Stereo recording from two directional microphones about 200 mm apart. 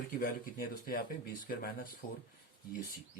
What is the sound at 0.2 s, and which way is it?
Speech, 45° left (ahead or behind).